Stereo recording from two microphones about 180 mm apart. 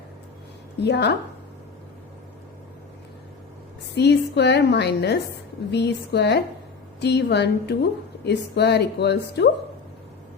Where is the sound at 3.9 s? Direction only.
70° left (ahead or behind).